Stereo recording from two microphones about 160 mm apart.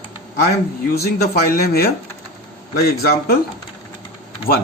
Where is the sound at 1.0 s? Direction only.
75° left (ahead or behind).